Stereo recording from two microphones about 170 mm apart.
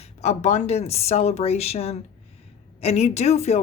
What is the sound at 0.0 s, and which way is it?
A woman's voice, 40° left (ahead or behind).